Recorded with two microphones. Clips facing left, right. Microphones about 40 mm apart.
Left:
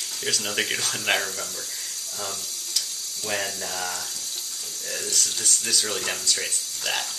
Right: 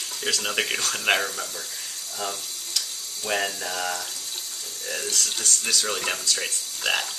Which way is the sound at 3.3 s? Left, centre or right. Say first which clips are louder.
Right 3 dB; centre.